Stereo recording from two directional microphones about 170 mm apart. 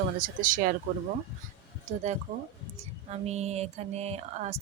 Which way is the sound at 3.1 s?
40° right (ahead or behind).